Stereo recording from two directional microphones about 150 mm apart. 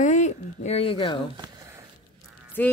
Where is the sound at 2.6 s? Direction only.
10° left (ahead or behind).